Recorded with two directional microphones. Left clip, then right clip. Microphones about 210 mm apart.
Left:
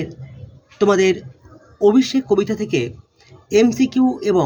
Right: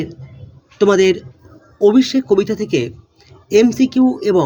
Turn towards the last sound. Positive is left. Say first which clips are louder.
# right 3 dB
turn(degrees=-15)  # may be behind; listen again after turning